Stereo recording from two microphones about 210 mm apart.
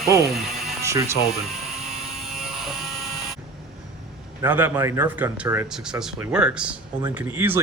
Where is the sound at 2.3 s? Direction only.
Centre (ahead or behind).